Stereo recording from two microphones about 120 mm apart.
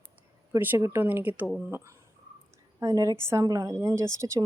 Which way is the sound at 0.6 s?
20° right (ahead or behind).